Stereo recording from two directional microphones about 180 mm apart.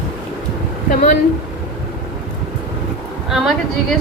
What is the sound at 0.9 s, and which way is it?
Speech, 45° left (ahead or behind).